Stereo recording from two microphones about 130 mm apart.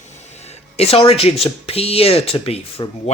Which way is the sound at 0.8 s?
50° left (ahead or behind).